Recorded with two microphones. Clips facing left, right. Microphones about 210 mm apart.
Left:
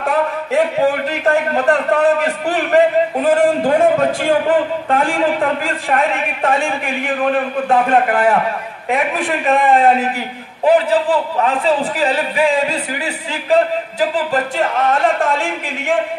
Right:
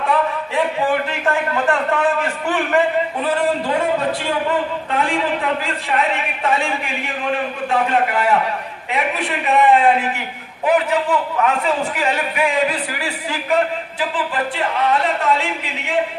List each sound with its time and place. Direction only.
0.0 s a man's voice: 45° left (ahead or behind)
10.7 s speech: 30° left (ahead or behind)
13.9 s a man's voice: 40° left (ahead or behind)